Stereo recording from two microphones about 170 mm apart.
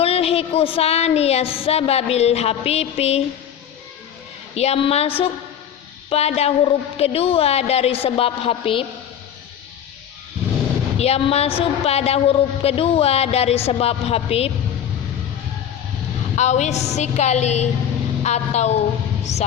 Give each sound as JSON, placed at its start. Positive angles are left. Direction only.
{"t": 0.0, "sound": "a woman's voice", "side_deg": 35}
{"t": 4.5, "sound": "a woman's voice", "side_deg": 40}
{"t": 10.9, "sound": "a woman's voice", "side_deg": 40}
{"t": 16.3, "sound": "a woman's voice", "side_deg": 40}